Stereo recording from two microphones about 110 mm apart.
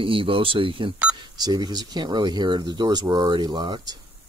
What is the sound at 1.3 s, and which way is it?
Speech, 40° right (ahead or behind).